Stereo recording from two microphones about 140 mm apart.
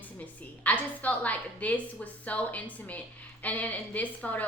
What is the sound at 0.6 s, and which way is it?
Speech, 10° left (ahead or behind).